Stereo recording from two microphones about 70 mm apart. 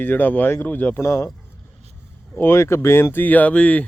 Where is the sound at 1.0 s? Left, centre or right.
Left.